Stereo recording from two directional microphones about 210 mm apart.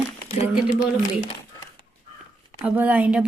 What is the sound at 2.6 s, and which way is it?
Speech, 10° right (ahead or behind).